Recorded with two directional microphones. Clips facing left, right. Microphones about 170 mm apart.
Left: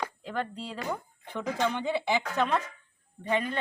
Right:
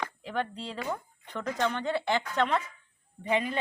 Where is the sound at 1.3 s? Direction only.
15° left (ahead or behind).